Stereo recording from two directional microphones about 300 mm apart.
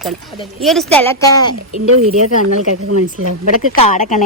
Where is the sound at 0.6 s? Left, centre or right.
Centre.